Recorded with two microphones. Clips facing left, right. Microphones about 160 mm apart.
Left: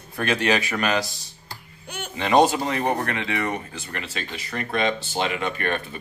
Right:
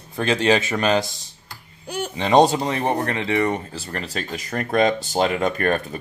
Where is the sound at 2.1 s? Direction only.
20° right (ahead or behind); by 6.0 s 45° right (ahead or behind).